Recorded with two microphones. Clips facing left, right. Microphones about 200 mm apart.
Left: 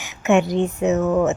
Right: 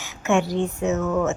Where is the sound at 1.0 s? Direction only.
35° left (ahead or behind).